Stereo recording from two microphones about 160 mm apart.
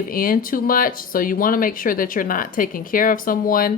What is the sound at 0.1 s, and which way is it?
Speech, 60° left (ahead or behind).